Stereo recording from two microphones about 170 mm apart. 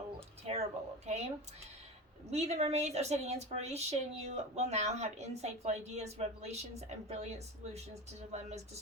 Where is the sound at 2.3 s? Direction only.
40° right (ahead or behind).